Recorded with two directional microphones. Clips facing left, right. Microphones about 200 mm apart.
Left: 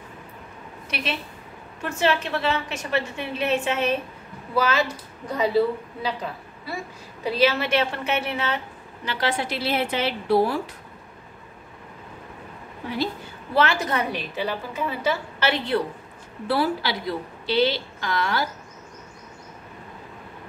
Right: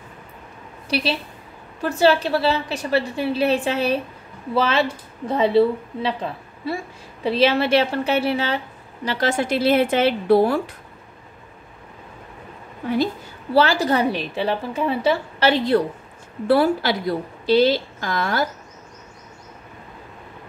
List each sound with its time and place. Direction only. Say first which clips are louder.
0.8 s a woman's voice: right 7 dB; 35° right (ahead or behind)
7.2 s a woman's voice: right 4 dB; 30° right (ahead or behind); by 10.6 s 55° right (ahead or behind)
13.5 s a woman's voice: right 5 dB; 35° right (ahead or behind)
16.4 s a woman's voice: right 6 dB; 50° right (ahead or behind)